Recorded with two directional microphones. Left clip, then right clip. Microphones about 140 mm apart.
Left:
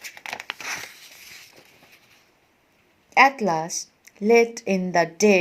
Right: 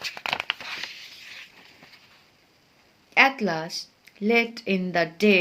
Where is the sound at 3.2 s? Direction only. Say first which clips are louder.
Left 3 dB; 35° left (ahead or behind).